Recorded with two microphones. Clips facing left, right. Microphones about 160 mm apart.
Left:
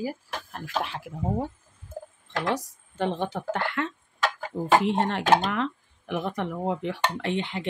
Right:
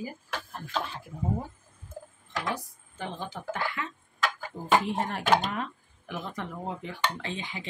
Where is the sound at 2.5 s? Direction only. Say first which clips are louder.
Left 8 dB; 75° left (ahead or behind).